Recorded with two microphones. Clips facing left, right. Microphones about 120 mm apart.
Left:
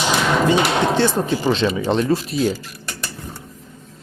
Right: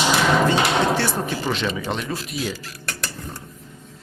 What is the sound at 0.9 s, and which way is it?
Speech, 20° left (ahead or behind).